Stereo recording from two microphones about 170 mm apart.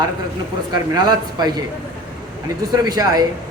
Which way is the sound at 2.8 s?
25° right (ahead or behind).